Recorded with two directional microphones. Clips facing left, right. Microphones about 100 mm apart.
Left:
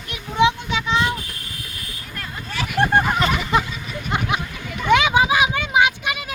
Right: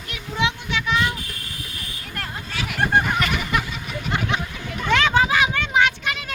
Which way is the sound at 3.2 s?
25° left (ahead or behind).